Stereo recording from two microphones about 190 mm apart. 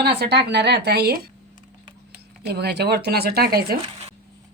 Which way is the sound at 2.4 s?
60° right (ahead or behind).